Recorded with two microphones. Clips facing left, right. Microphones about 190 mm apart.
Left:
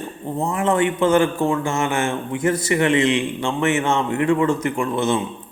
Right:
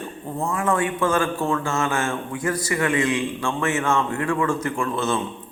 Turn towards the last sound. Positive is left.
turn(degrees=15)  # may be behind; listen again after turning